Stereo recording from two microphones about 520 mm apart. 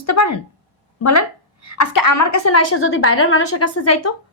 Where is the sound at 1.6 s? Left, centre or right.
Left.